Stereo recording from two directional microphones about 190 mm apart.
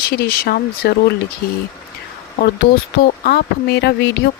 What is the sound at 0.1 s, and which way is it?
Speech, 55° left (ahead or behind).